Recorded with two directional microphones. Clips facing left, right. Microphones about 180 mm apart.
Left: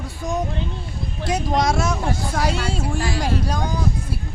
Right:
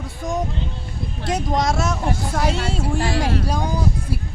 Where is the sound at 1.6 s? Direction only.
Centre (ahead or behind).